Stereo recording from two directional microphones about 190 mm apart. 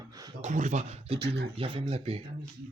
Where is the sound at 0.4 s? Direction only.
40° right (ahead or behind).